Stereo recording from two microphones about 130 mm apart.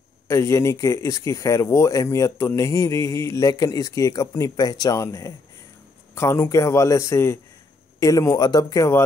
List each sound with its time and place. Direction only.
0.3 s speech: 20° left (ahead or behind)